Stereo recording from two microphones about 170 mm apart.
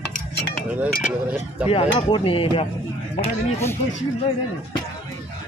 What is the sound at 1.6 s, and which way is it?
Speech, 35° left (ahead or behind).